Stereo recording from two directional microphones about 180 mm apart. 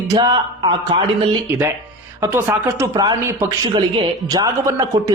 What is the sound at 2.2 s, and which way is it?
A man's voice, 15° right (ahead or behind).